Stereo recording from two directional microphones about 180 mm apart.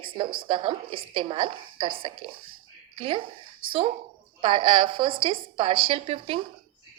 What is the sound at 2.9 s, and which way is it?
Speech, 30° right (ahead or behind).